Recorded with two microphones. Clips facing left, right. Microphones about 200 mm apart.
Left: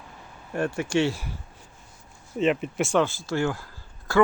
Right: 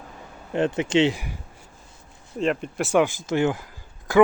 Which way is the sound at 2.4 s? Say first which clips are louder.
Left 1 dB; centre (ahead or behind).